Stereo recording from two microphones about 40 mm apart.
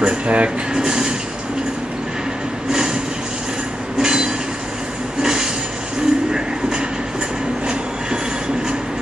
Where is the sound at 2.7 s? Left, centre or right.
Centre.